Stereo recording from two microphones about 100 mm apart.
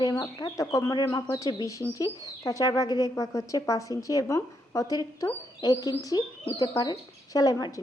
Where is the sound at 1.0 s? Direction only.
40° left (ahead or behind).